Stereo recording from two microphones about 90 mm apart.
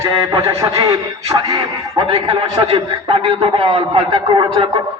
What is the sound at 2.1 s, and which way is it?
A man's voice, 85° right.